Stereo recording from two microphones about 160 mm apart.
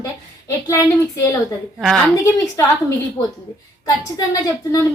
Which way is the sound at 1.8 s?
Centre (ahead or behind).